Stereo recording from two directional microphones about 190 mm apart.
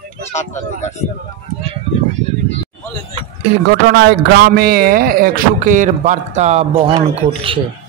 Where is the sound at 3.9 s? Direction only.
60° right (ahead or behind); by 7.6 s 25° right (ahead or behind).